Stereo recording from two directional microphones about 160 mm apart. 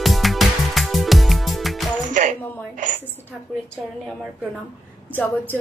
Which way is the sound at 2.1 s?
55° right (ahead or behind).